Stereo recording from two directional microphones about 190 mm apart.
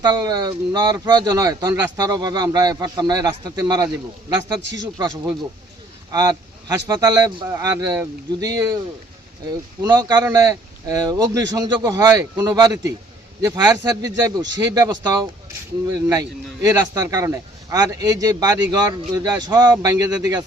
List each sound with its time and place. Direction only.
0.0 s speech: 20° right (ahead or behind)
9.8 s speech: 20° right (ahead or behind)